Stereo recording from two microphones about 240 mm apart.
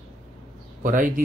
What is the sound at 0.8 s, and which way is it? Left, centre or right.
Speech, right.